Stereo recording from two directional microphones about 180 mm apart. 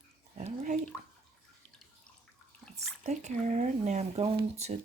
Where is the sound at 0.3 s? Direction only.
40° right (ahead or behind).